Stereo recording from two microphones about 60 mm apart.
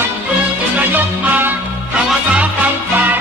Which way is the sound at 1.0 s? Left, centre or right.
Right.